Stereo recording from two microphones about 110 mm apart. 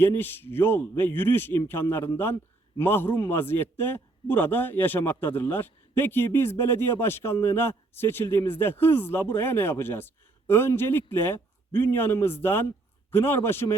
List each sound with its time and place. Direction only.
0.0 s a man's voice: 20° left (ahead or behind)